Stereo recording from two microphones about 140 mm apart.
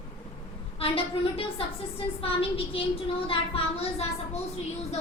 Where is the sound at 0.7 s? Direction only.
40° left (ahead or behind).